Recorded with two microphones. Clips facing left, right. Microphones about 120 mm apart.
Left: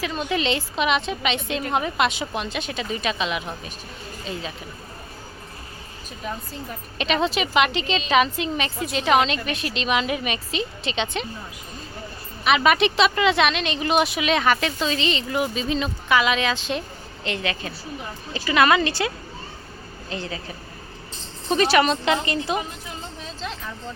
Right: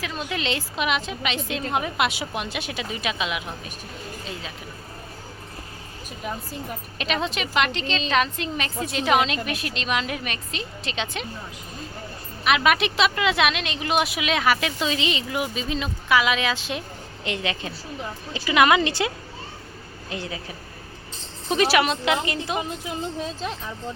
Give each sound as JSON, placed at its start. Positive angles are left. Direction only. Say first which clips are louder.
{"t": 0.0, "sound": "a woman's voice", "louder": "left 4 dB", "side_deg": 0}
{"t": 7.0, "sound": "a woman's voice", "louder": "left 4 dB", "side_deg": 0}
{"t": 12.5, "sound": "a woman's voice", "louder": "left 2 dB", "side_deg": 0}
{"t": 17.2, "sound": "a woman's voice", "louder": "left 1 dB", "side_deg": -20}
{"t": 21.5, "sound": "a woman's voice", "louder": "left 2 dB", "side_deg": -5}